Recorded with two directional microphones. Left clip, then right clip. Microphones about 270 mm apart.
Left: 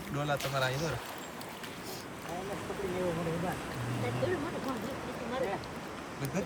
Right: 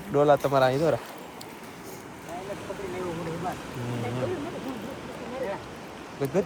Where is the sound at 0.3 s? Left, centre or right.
Right.